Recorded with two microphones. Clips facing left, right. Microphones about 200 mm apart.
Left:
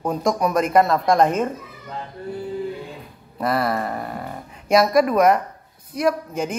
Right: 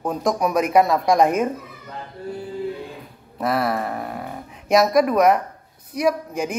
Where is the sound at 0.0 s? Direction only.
Centre (ahead or behind).